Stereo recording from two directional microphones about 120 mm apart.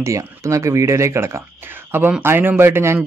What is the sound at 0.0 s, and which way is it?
Speech, 25° right (ahead or behind).